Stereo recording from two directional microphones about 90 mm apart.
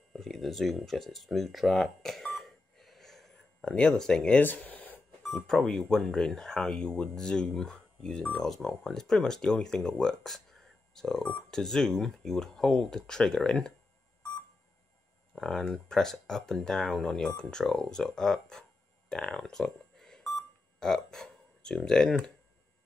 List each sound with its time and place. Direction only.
0.1 s speech: centre (ahead or behind)
4.5 s a sound: 20° left (ahead or behind)
5.2 s speech: 5° left (ahead or behind)
15.3 s speech: 5° left (ahead or behind)